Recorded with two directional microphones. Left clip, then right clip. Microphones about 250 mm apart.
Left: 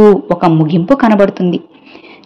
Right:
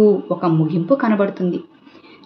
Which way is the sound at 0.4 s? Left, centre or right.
Left.